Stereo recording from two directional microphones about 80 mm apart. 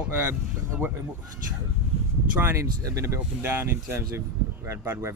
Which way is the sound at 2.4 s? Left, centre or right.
Right.